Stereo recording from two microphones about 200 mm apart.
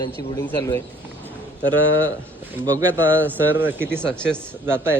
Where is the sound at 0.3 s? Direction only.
15° left (ahead or behind).